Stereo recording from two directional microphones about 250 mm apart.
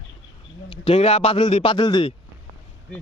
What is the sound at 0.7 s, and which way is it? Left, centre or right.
A man's voice, left.